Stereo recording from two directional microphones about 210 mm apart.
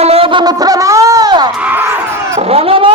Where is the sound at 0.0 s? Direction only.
25° right (ahead or behind); by 2.4 s 10° right (ahead or behind).